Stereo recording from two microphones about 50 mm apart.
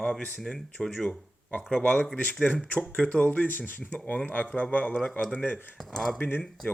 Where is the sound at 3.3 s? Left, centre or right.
Left.